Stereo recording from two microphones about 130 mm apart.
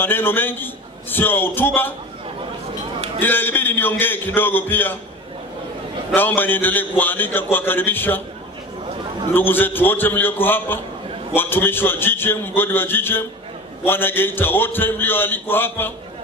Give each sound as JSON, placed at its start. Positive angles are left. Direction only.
{"t": 0.0, "sound": "a man's voice", "side_deg": 15}
{"t": 3.2, "sound": "a man's voice", "side_deg": 15}
{"t": 6.1, "sound": "a man's voice", "side_deg": 15}
{"t": 9.3, "sound": "a man's voice", "side_deg": 15}